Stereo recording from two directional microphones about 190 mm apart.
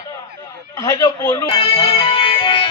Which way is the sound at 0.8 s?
15° left (ahead or behind).